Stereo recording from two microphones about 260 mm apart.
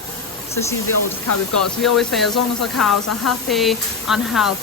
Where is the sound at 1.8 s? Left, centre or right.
Centre.